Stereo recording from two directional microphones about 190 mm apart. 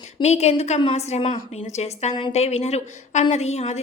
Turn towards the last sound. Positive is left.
turn(degrees=35)  # may be behind; listen again after turning